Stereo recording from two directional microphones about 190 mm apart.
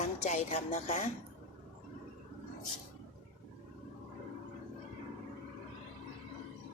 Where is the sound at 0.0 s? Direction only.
35° left (ahead or behind).